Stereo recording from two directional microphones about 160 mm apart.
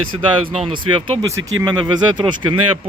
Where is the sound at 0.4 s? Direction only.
30° right (ahead or behind).